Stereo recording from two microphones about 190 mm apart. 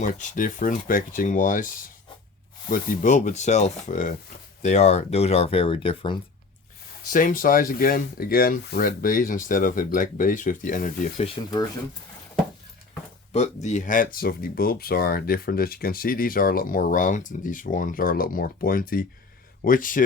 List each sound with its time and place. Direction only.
0.0 s speech: 45° left (ahead or behind); by 6.1 s 25° left (ahead or behind)
7.1 s speech: 45° left (ahead or behind)
13.3 s speech: 35° left (ahead or behind)